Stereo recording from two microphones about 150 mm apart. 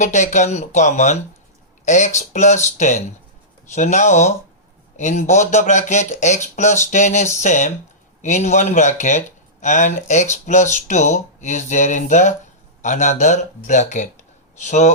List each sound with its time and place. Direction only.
0.0 s speech: 50° left (ahead or behind)